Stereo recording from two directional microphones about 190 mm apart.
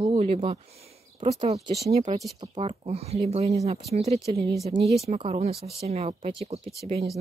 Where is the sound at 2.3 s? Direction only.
25° right (ahead or behind).